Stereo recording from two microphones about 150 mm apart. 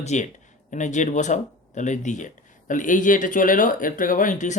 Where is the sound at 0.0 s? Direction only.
50° left (ahead or behind).